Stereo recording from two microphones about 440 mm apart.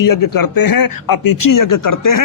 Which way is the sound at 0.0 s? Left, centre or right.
Left.